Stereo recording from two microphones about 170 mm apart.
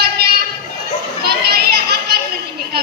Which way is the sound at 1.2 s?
70° right (ahead or behind).